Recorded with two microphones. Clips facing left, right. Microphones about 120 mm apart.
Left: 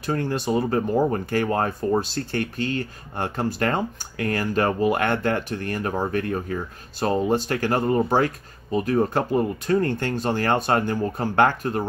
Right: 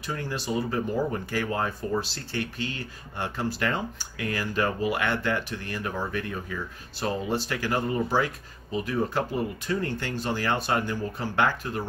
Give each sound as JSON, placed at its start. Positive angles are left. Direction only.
{"t": 0.0, "sound": "speech", "side_deg": 50}